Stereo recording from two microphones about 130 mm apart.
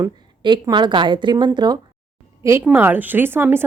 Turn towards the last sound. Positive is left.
turn(degrees=-15)  # may be behind; listen again after turning